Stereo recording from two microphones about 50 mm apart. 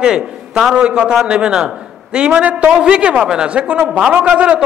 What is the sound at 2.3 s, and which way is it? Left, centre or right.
A man's voice, right.